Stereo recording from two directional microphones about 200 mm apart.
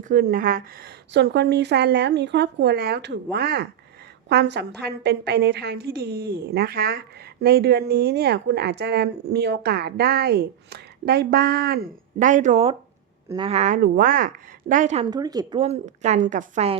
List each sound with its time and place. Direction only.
0.1 s a woman's voice: 45° right (ahead or behind)
1.1 s a woman's voice: 60° right (ahead or behind); by 12.7 s 35° right (ahead or behind)
13.2 s a woman's voice: 25° right (ahead or behind)
15.0 s a woman's voice: 20° right (ahead or behind)
15.6 s a woman's voice: 35° right (ahead or behind)